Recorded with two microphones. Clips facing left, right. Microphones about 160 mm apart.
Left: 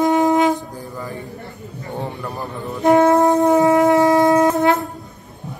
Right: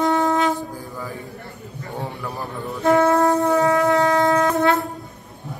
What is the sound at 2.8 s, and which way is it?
Shofar, 15° left (ahead or behind).